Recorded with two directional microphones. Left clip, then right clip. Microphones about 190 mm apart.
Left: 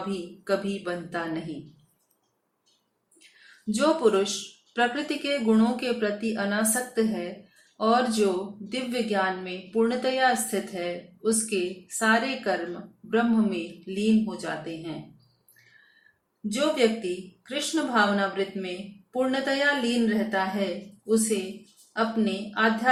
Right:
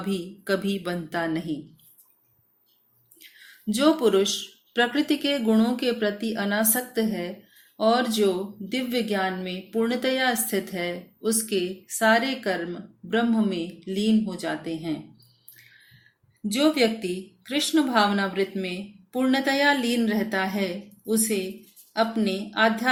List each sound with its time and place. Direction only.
0.4 s a woman's voice: 45° right (ahead or behind)
3.7 s a woman's voice: 40° right (ahead or behind)
16.5 s a woman's voice: 45° right (ahead or behind)
21.9 s a woman's voice: 45° right (ahead or behind)